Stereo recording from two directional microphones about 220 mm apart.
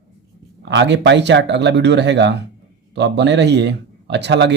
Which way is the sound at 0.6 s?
50° right (ahead or behind).